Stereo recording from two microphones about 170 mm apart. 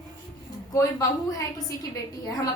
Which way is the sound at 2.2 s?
20° left (ahead or behind).